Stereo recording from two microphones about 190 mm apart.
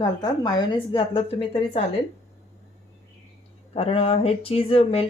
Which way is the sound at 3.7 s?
30° left (ahead or behind).